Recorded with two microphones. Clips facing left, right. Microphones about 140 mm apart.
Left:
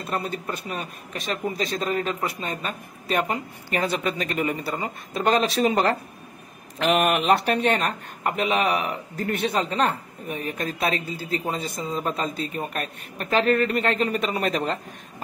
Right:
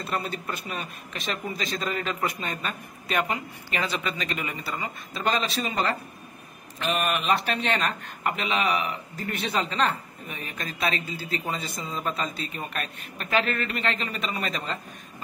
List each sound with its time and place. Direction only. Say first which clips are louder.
0.1 s a man's voice: left 3 dB; 35° left (ahead or behind)
3.9 s a woman's voice: left 4 dB; 50° left (ahead or behind)
6.8 s speech: left 6 dB; 80° left; by 7.6 s 60° left (ahead or behind)
7.7 s a man's voice: left 2 dB; 40° left (ahead or behind)
8.5 s a woman's voice: left 3 dB; 50° left (ahead or behind)